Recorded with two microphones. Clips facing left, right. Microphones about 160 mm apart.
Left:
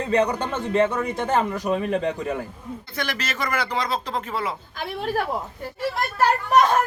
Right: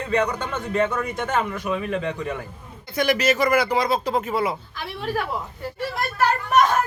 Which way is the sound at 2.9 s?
10° right (ahead or behind).